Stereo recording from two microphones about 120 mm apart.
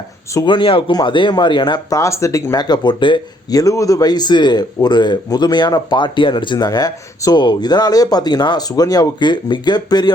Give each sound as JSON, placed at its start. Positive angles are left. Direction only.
{"t": 0.4, "sound": "a man's voice", "side_deg": 45}
{"t": 3.5, "sound": "a man's voice", "side_deg": 30}